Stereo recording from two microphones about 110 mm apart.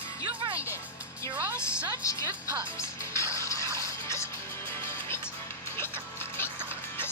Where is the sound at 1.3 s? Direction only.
15° right (ahead or behind).